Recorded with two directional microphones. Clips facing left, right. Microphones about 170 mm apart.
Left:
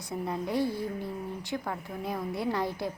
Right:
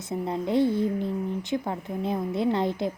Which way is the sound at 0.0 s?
25° right (ahead or behind).